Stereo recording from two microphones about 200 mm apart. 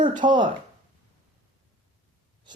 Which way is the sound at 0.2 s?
25° right (ahead or behind).